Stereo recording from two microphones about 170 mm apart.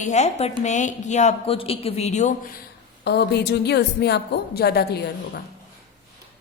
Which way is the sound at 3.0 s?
80° left.